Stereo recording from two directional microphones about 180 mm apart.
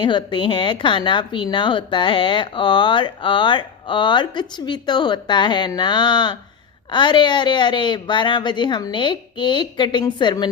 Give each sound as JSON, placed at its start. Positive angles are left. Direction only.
{"t": 0.0, "sound": "a woman's voice", "side_deg": 25}